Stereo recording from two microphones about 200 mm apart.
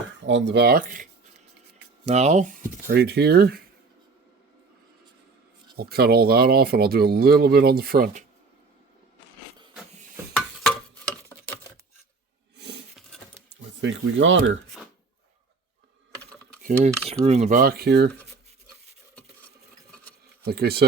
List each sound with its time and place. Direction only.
0.2 s speech: 65° right (ahead or behind); by 1.0 s 45° right (ahead or behind)
2.0 s speech: 35° right (ahead or behind); by 3.6 s 50° right (ahead or behind)
5.7 s speech: 50° right (ahead or behind)
11.1 s a sound: 10° left (ahead or behind)
12.5 s a sound: 60° right (ahead or behind)
13.8 s speech: 65° right (ahead or behind)
16.6 s cutlery: 30° right (ahead or behind)
17.6 s speech: 50° right (ahead or behind)
20.4 s speech: 55° right (ahead or behind)